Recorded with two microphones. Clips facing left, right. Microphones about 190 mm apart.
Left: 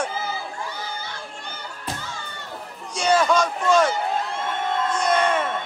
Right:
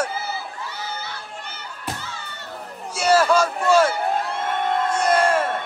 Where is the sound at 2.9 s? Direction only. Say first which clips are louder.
Right 2 dB; 5° right (ahead or behind).